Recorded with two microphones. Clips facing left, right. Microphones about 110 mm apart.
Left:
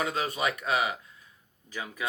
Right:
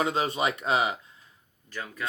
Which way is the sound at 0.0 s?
25° right (ahead or behind).